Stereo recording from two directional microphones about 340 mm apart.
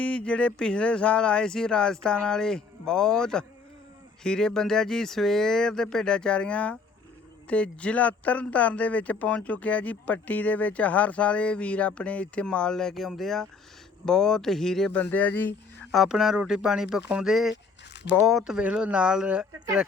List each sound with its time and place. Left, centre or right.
0.0 s speech: centre